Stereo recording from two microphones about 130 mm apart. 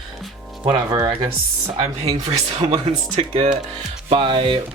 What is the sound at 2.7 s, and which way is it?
Speech, 50° right (ahead or behind).